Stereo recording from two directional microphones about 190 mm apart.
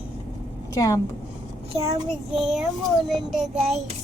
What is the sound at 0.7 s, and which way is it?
Speech, 20° left (ahead or behind).